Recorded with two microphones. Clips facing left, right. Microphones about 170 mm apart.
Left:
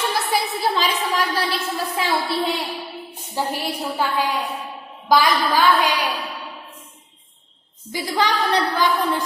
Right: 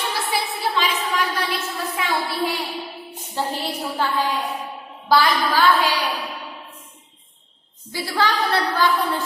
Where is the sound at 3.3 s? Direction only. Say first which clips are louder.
Left 1 dB; 10° left (ahead or behind).